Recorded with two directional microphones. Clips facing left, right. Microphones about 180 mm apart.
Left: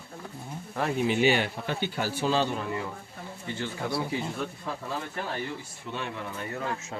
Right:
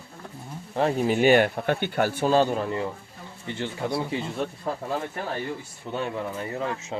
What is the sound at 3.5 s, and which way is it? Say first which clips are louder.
Speech: right 3 dB; 20° right (ahead or behind).